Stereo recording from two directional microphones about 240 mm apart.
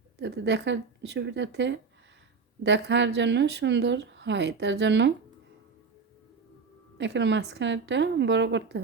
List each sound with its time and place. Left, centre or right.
0.2 s speech: right
7.0 s speech: right